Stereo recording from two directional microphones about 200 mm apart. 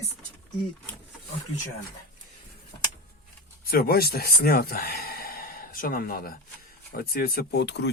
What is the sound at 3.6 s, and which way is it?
Speech, 50° left (ahead or behind).